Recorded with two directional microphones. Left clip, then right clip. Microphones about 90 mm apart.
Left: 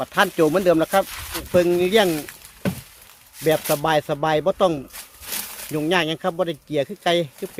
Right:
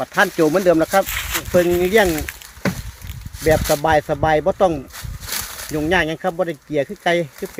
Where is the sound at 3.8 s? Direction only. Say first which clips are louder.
Right 3 dB; 5° left (ahead or behind).